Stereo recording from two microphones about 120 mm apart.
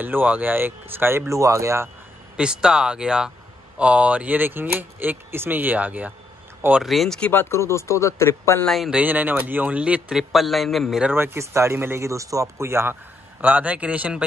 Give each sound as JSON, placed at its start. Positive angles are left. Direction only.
{"t": 0.0, "sound": "speech", "side_deg": -15}
{"t": 2.3, "sound": "speech", "side_deg": -5}
{"t": 6.8, "sound": "speech", "side_deg": 0}
{"t": 8.6, "sound": "speech", "side_deg": 0}
{"t": 8.9, "sound": "speech", "side_deg": -15}
{"t": 11.1, "sound": "speech", "side_deg": -20}